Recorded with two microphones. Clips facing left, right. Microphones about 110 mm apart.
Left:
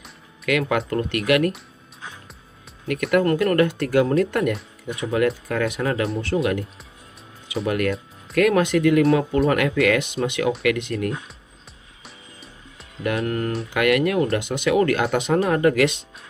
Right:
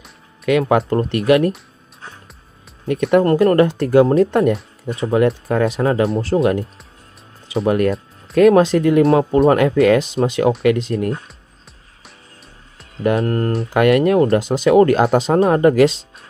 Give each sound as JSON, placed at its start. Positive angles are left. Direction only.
{"t": 0.5, "sound": "speech", "side_deg": -30}
{"t": 2.9, "sound": "speech", "side_deg": -30}
{"t": 7.6, "sound": "speech", "side_deg": -30}
{"t": 13.0, "sound": "speech", "side_deg": -35}